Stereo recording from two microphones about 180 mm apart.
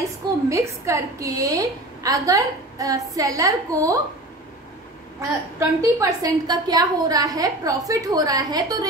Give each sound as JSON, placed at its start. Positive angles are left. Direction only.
{"t": 0.5, "sound": "a woman's voice", "side_deg": -15}
{"t": 5.6, "sound": "a woman's voice", "side_deg": -20}